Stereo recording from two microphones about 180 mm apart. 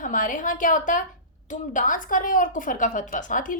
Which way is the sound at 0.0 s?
45° left (ahead or behind).